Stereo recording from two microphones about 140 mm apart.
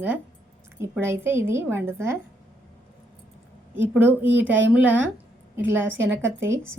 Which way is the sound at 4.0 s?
15° right (ahead or behind).